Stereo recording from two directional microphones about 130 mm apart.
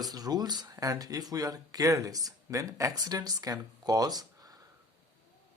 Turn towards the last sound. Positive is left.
turn(degrees=-30)  # may be behind; listen again after turning